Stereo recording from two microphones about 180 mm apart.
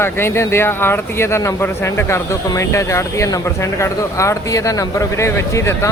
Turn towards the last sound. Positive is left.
turn(degrees=15)  # may be behind; listen again after turning